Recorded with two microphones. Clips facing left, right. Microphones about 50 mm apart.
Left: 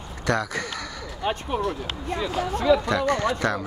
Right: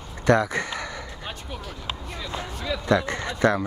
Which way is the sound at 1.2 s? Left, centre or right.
Left.